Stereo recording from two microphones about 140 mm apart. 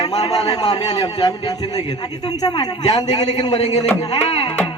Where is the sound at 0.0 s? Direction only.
50° left (ahead or behind).